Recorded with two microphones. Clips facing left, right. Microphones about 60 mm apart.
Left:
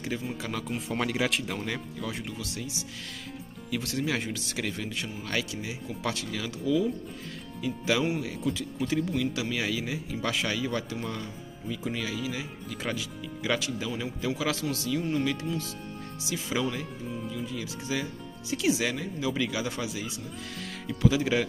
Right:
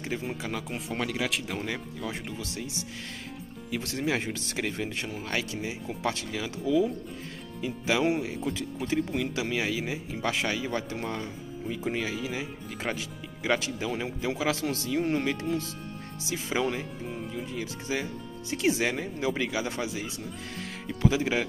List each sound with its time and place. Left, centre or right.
0.4 s speech: centre
0.7 s speech: centre
2.0 s speech: right
16.3 s speech: right